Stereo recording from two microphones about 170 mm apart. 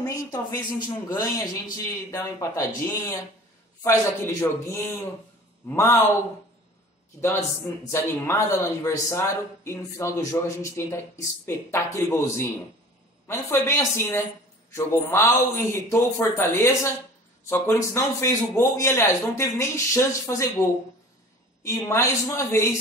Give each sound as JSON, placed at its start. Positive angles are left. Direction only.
{"t": 0.0, "sound": "a man's voice", "side_deg": 20}
{"t": 7.2, "sound": "a man's voice", "side_deg": 15}
{"t": 21.6, "sound": "a man's voice", "side_deg": 15}